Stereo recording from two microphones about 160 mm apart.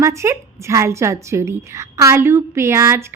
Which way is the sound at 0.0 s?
15° right (ahead or behind).